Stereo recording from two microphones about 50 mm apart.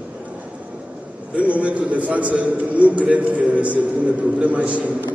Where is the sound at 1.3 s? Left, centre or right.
Right.